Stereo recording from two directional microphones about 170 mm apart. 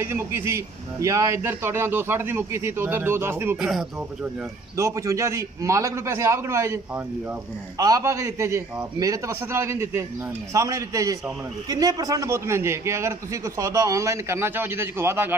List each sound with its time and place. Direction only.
0.0 s a man's voice: 15° right (ahead or behind)
4.7 s a man's voice: 15° right (ahead or behind)